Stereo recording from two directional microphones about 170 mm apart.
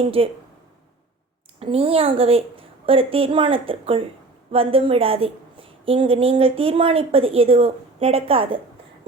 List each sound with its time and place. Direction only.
0.0 s a woman's voice: 35° right (ahead or behind)
1.5 s a woman's voice: 35° right (ahead or behind)